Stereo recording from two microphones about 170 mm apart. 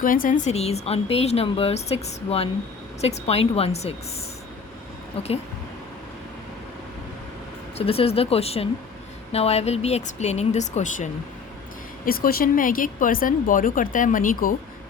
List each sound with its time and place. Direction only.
0.0 s speech: 55° left (ahead or behind); by 3.9 s 35° left (ahead or behind)
5.2 s speech: 35° left (ahead or behind)
7.8 s speech: 35° left (ahead or behind)
12.0 s speech: 60° left (ahead or behind)